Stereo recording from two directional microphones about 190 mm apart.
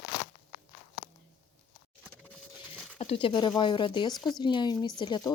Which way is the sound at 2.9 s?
30° left (ahead or behind).